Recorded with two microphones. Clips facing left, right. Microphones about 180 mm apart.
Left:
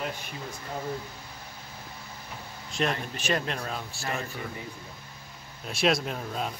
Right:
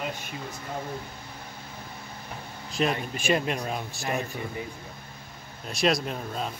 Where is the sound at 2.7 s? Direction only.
5° right (ahead or behind).